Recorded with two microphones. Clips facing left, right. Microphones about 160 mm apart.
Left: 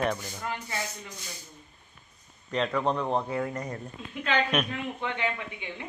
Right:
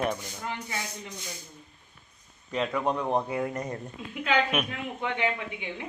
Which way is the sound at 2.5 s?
5° right (ahead or behind).